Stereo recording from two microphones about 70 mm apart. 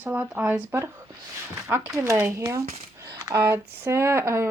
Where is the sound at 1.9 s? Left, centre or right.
Right.